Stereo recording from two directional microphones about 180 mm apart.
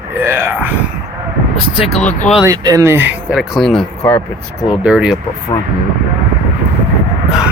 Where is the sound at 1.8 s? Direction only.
35° left (ahead or behind).